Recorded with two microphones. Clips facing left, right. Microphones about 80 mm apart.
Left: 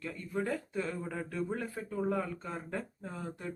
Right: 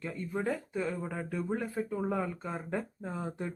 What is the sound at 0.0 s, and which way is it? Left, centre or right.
Speech, centre.